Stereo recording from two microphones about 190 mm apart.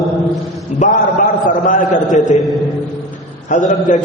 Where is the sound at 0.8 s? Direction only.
40° left (ahead or behind).